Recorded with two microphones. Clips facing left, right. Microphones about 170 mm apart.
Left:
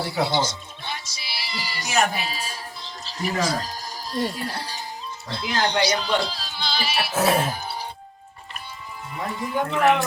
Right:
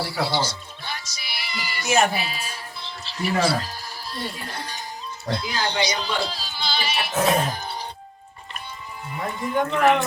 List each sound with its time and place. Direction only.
0.0 s speech: 20° left (ahead or behind)
6.0 s speech: centre (ahead or behind)
9.1 s speech: centre (ahead or behind)